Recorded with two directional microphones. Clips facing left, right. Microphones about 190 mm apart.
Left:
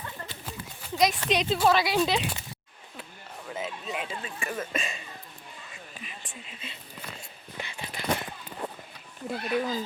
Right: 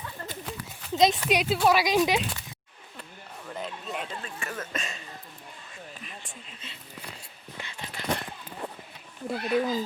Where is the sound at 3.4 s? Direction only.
5° left (ahead or behind).